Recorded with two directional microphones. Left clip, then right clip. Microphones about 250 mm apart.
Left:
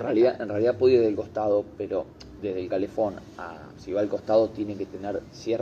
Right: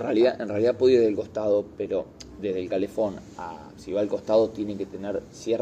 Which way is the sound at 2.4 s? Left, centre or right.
Centre.